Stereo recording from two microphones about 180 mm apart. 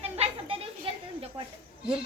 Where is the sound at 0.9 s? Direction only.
30° right (ahead or behind).